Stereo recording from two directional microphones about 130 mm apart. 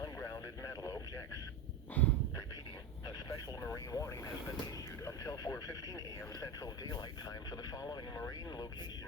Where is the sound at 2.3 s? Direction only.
25° left (ahead or behind).